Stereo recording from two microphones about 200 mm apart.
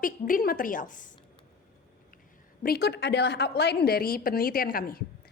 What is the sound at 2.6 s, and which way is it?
A woman's voice, 50° left (ahead or behind).